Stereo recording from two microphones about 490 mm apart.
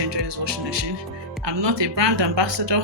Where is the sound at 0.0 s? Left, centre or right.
Right.